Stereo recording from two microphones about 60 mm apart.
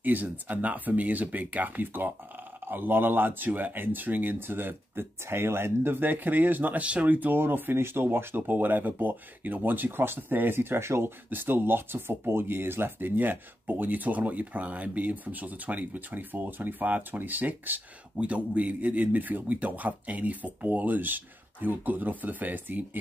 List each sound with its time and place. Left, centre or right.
0.0 s speech: right
11.2 s speech: right